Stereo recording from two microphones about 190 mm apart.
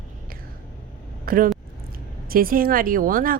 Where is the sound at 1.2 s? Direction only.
50° right (ahead or behind).